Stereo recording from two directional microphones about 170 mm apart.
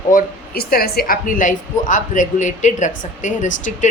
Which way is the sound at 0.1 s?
60° left (ahead or behind).